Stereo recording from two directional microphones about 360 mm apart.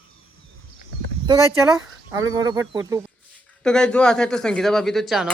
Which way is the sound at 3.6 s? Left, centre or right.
Centre.